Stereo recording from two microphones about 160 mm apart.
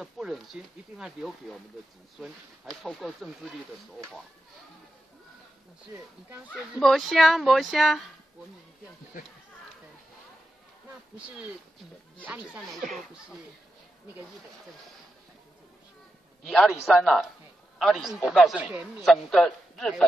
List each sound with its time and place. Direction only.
0.0 s a man's voice: centre (ahead or behind)
6.7 s a man's voice: centre (ahead or behind)
12.3 s a man's voice: centre (ahead or behind)
16.4 s a man's voice: centre (ahead or behind)